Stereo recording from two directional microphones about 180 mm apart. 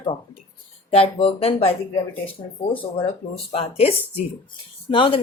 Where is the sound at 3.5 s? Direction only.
35° left (ahead or behind).